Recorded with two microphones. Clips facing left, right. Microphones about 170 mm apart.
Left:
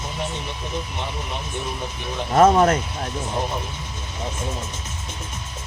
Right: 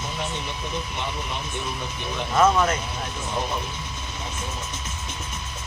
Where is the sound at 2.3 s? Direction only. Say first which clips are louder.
Left 5 dB; 45° left (ahead or behind).